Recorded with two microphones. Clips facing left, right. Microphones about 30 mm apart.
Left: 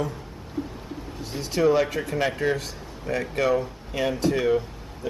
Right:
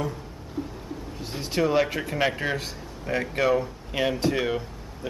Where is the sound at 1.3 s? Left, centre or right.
Centre.